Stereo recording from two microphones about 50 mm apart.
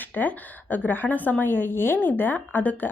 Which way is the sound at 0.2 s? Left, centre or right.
Left.